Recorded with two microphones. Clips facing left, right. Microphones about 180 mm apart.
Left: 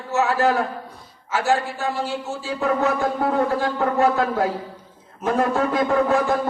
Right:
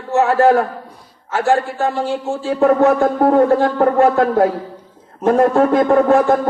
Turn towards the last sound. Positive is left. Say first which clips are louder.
# right 7 dB
turn(degrees=-50)  # may be behind; listen again after turning